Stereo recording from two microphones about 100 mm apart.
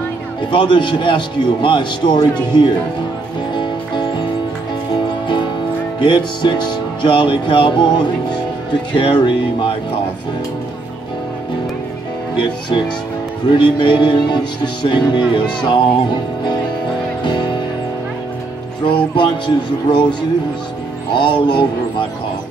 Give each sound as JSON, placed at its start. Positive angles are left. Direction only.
{"t": 0.5, "sound": "a man's voice", "side_deg": 55}
{"t": 3.5, "sound": "music", "side_deg": 55}
{"t": 5.9, "sound": "speech", "side_deg": 50}
{"t": 8.9, "sound": "a man's voice", "side_deg": 55}
{"t": 12.4, "sound": "speech", "side_deg": 50}
{"t": 17.2, "sound": "music", "side_deg": 50}
{"t": 18.9, "sound": "speech", "side_deg": 50}